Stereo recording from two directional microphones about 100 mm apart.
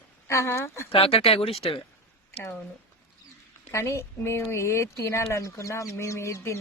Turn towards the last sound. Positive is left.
turn(degrees=30)  # may be behind; listen again after turning